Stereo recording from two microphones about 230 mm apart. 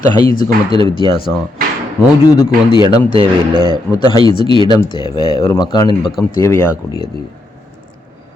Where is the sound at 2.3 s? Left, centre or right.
Centre.